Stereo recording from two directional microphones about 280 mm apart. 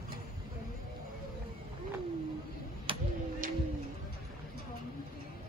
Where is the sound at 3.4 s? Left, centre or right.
Right.